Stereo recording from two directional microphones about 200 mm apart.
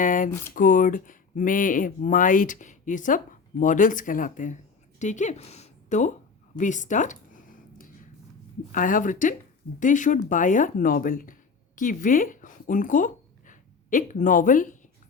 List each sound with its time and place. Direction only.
0.0 s a woman's voice: 40° left (ahead or behind)
6.6 s a sound: 40° left (ahead or behind)
8.7 s speech: 40° left (ahead or behind)